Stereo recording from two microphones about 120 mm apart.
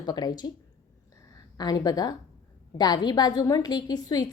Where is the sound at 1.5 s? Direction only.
35° left (ahead or behind).